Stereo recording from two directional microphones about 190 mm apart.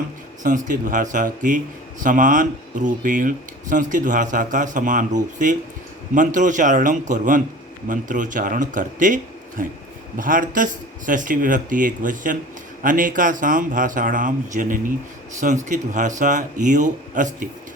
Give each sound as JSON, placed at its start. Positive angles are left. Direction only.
{"t": 0.4, "sound": "speech", "side_deg": -45}